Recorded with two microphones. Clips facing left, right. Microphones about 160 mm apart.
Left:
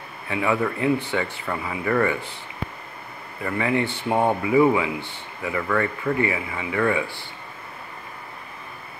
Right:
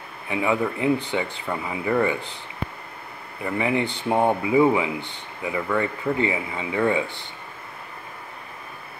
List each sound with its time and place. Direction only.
0.3 s speech: 15° right (ahead or behind)
3.4 s speech: 20° right (ahead or behind)